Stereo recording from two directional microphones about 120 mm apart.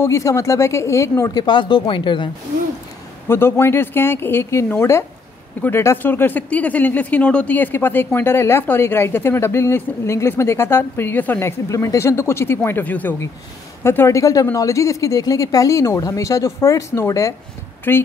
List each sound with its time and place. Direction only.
0.0 s speech: 25° left (ahead or behind)
1.4 s speech: 40° left (ahead or behind)
3.3 s speech: 20° left (ahead or behind)